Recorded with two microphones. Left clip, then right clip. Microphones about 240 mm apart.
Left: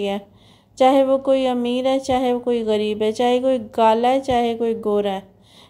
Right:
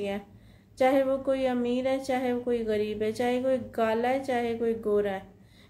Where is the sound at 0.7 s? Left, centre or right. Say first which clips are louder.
Left 9 dB; left.